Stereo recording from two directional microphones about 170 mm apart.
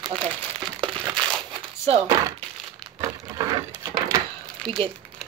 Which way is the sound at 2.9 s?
25° right (ahead or behind).